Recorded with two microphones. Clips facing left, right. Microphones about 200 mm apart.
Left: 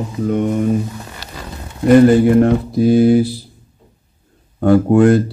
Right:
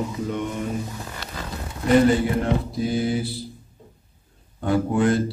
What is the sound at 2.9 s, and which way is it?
Speech, 60° left (ahead or behind).